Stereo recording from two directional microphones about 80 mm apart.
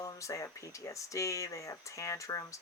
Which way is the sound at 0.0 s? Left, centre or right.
Left.